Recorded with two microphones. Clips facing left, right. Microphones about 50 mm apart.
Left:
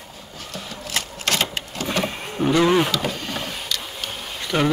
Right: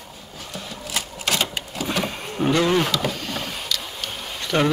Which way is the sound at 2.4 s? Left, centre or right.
Centre.